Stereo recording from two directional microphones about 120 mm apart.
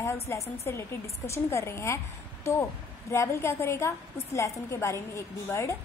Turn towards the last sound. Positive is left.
turn(degrees=25)  # may be behind; listen again after turning